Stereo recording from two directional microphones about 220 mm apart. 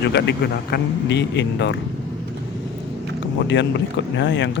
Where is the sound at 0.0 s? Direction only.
50° left (ahead or behind).